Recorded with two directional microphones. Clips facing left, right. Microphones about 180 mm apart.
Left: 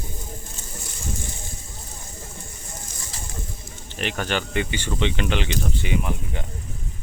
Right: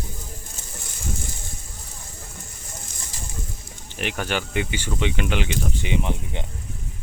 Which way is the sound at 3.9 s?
10° right (ahead or behind).